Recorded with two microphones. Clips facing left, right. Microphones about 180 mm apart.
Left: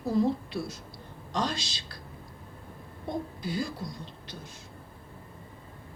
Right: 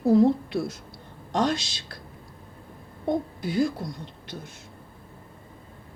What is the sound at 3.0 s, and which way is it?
Speech, 50° right (ahead or behind).